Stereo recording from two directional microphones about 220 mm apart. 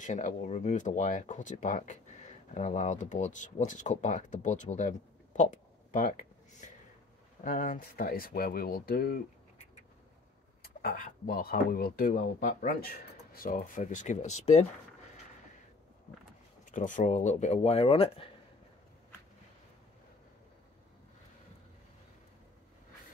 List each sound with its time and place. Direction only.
0.0 s speech: 35° left (ahead or behind)
7.4 s speech: 35° left (ahead or behind)
10.6 s speech: 40° left (ahead or behind)
16.7 s speech: 35° left (ahead or behind)